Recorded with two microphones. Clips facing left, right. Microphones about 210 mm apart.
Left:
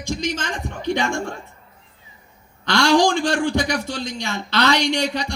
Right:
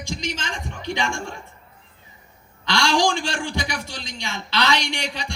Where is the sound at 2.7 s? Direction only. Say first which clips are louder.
Left 4 dB; 60° left (ahead or behind).